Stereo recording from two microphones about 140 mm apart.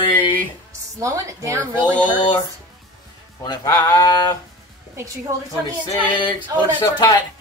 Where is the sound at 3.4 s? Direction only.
30° left (ahead or behind).